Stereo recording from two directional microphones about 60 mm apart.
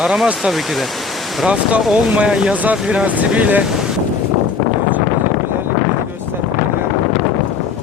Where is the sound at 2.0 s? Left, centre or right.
Right.